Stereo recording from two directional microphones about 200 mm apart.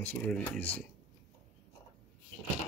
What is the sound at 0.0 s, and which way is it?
Speech, 5° left (ahead or behind).